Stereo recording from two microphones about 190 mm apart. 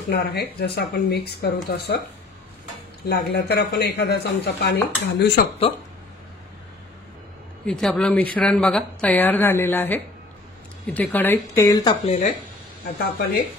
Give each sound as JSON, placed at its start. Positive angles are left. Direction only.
{"t": 0.1, "sound": "speech", "side_deg": 55}
{"t": 3.1, "sound": "speech", "side_deg": 60}
{"t": 7.6, "sound": "speech", "side_deg": 0}
{"t": 12.1, "sound": "speech", "side_deg": 40}
{"t": 12.8, "sound": "speech", "side_deg": 55}